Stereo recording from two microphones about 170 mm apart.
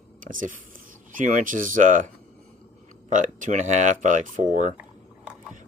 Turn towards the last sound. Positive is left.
turn(degrees=-45)  # may be behind; listen again after turning